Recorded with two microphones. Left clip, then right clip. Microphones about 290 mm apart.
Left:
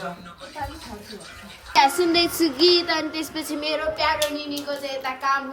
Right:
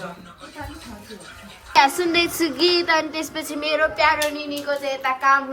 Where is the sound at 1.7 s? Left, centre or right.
Centre.